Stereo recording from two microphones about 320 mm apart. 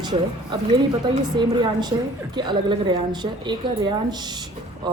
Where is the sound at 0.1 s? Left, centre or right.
Centre.